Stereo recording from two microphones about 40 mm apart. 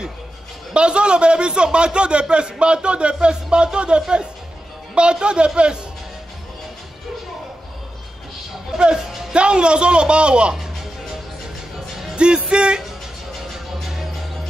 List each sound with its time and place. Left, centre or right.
0.7 s a man's voice: right
8.7 s a man's voice: right
12.2 s a man's voice: right
13.8 s music: centre